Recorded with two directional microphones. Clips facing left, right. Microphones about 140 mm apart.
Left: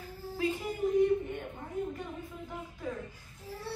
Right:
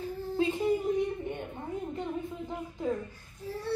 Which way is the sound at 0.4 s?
25° right (ahead or behind).